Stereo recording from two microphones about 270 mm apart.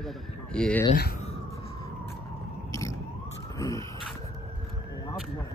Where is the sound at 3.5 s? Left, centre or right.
Centre.